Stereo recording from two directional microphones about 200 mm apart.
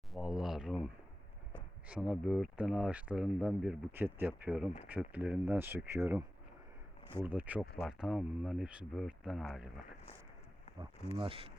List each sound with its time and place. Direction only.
0.1 s speech: centre (ahead or behind)
1.9 s speech: 5° right (ahead or behind)
10.8 s speech: 25° right (ahead or behind)